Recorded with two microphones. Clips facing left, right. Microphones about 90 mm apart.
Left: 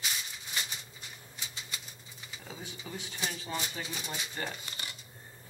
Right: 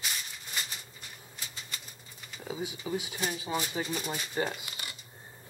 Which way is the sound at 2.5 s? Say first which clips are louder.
Right 9 dB; 15° right (ahead or behind).